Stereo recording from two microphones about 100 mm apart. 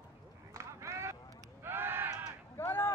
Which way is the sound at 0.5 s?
30° right (ahead or behind).